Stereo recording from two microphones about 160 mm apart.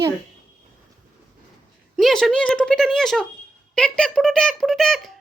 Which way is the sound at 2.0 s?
Centre (ahead or behind).